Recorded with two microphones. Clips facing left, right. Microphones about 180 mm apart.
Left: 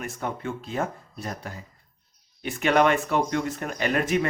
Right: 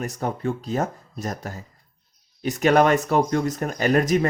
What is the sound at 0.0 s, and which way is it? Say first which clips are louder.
Speech: right 5 dB; 40° right (ahead or behind).